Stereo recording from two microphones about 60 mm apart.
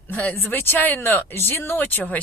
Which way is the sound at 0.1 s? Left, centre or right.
Left.